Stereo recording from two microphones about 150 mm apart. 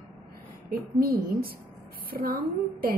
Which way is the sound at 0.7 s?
90° right.